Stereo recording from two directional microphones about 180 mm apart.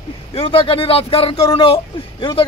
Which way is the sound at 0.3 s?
30° left (ahead or behind).